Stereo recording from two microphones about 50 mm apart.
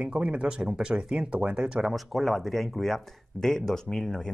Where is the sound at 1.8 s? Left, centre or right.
Centre.